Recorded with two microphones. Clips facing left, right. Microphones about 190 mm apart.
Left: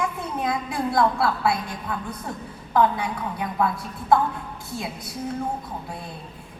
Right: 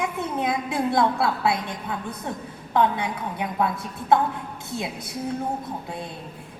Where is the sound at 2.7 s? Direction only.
20° right (ahead or behind).